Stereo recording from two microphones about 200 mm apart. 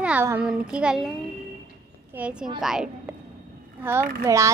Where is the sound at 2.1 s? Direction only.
5° right (ahead or behind).